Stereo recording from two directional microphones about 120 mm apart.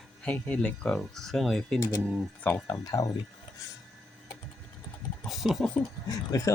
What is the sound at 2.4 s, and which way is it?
Speech, 15° left (ahead or behind).